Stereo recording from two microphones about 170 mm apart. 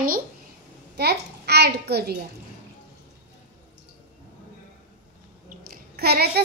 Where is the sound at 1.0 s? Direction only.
75° right (ahead or behind).